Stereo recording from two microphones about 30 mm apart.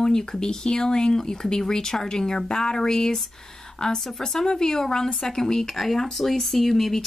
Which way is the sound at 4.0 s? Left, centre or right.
Centre.